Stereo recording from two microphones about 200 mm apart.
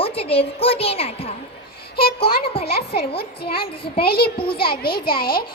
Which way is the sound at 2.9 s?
50° left (ahead or behind).